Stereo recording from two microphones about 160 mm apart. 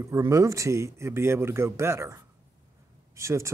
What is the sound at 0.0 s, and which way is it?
Speech, 20° right (ahead or behind).